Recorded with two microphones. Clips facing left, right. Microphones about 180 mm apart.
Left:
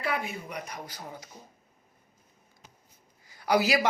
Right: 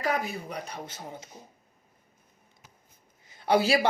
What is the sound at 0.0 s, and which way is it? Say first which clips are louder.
Speech: right 3 dB; 40° right (ahead or behind).